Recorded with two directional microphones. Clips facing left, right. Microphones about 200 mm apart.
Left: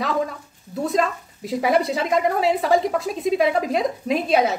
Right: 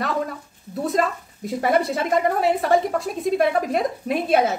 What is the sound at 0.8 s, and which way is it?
A woman's voice, centre (ahead or behind).